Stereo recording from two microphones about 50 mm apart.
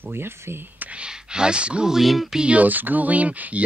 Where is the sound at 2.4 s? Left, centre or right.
Right.